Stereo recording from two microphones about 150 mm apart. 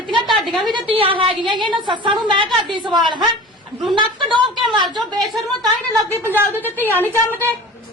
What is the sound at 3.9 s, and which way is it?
A woman's voice, 30° right (ahead or behind).